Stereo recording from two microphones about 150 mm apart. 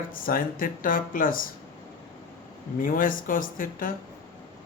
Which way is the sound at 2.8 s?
65° left (ahead or behind).